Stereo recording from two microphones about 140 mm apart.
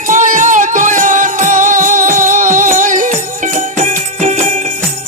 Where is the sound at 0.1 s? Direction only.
65° right (ahead or behind).